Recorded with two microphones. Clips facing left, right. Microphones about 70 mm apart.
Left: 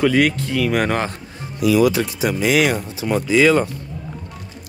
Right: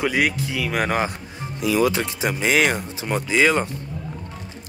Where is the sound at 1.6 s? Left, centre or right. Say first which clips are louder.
Left 4 dB; right.